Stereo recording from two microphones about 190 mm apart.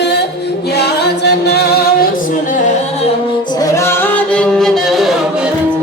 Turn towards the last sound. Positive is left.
turn(degrees=0)  # may be behind; listen again after turning